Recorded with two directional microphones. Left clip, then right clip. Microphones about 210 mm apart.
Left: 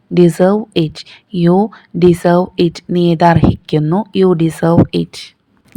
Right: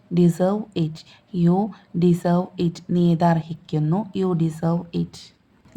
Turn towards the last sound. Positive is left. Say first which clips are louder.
# left 17 dB
turn(degrees=30)  # may be behind; listen again after turning